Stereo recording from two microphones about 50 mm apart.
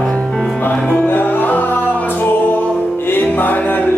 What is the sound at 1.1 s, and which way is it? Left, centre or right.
Music, left.